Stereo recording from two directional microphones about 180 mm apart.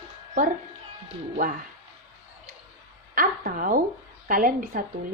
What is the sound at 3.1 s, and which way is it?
Speech, 50° right (ahead or behind).